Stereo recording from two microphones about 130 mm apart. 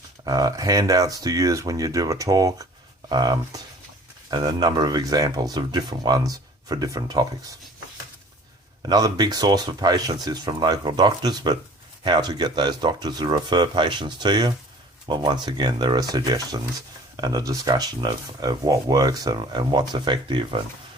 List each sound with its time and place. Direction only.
0.3 s speech: 30° right (ahead or behind)
8.9 s speech: 30° right (ahead or behind)